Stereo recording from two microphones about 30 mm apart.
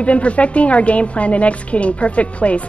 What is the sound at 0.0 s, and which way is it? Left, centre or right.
A woman's voice, left.